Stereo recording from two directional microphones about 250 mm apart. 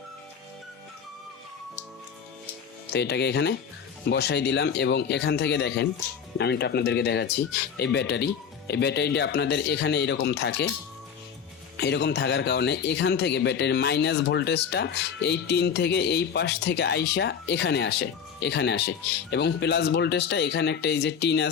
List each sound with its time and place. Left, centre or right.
2.9 s speech: left
11.8 s speech: left